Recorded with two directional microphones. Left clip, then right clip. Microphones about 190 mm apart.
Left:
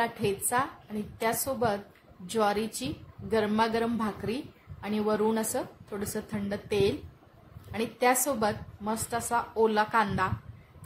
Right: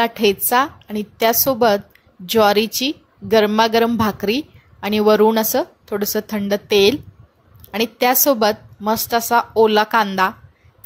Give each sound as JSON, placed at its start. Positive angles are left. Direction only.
{"t": 0.0, "sound": "a woman's voice", "side_deg": -45}